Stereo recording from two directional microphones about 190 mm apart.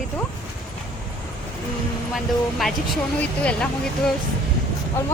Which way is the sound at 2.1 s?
Centre (ahead or behind).